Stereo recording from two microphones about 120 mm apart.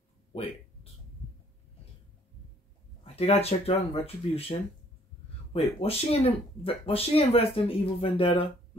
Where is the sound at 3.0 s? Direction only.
55° left (ahead or behind).